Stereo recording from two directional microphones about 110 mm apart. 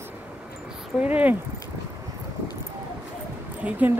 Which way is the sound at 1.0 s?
15° right (ahead or behind).